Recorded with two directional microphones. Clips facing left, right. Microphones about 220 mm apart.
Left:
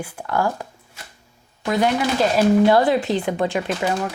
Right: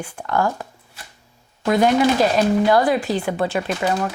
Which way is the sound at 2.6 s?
25° left (ahead or behind).